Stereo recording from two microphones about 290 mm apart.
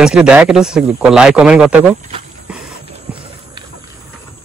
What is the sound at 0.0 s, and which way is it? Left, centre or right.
Speech, centre.